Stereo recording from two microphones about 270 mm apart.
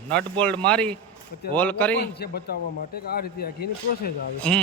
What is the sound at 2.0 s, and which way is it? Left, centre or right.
Speech, left.